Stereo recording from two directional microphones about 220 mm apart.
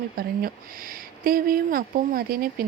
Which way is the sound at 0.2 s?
45° right (ahead or behind).